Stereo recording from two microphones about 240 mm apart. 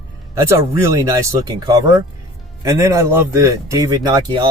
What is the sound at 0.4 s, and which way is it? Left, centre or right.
Speech, centre.